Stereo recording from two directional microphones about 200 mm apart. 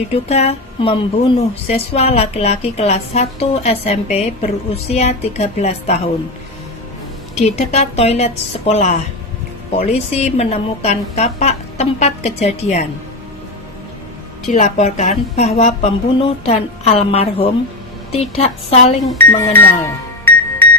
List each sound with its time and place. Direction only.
0.1 s speech: 30° left (ahead or behind)
7.3 s speech: 35° left (ahead or behind)
14.5 s a woman's voice: 35° left (ahead or behind)
19.1 s music: 10° left (ahead or behind)